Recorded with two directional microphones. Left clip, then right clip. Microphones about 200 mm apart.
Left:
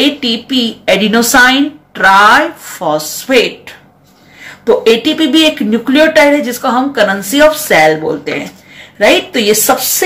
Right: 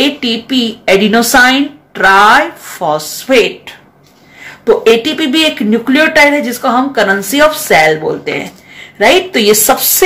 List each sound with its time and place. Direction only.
0.0 s speech: 20° right (ahead or behind)